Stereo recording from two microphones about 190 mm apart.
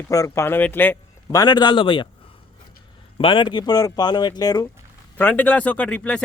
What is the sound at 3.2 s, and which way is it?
Speech, 25° left (ahead or behind).